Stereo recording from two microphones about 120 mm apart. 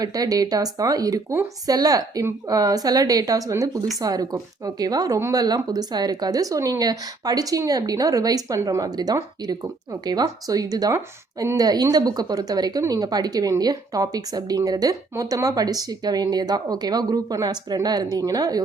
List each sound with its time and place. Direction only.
0.0 s a woman's voice: 30° right (ahead or behind)